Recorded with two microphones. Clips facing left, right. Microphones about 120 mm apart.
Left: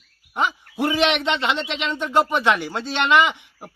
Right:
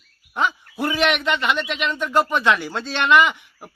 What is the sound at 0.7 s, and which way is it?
Speech, 15° left (ahead or behind).